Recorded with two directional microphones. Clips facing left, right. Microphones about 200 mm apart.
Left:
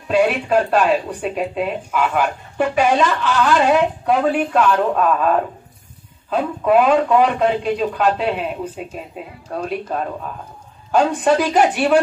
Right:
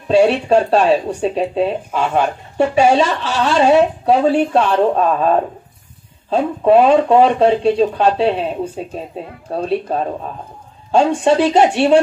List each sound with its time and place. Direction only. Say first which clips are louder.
0.1 s speech: right 4 dB; 30° right (ahead or behind)